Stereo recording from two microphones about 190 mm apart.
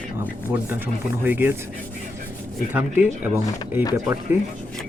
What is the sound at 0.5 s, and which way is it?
Speech, 10° right (ahead or behind).